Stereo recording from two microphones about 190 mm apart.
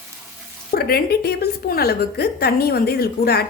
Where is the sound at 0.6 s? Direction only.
55° left (ahead or behind).